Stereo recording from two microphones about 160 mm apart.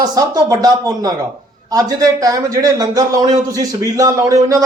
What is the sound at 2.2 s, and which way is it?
A man's voice, 20° right (ahead or behind).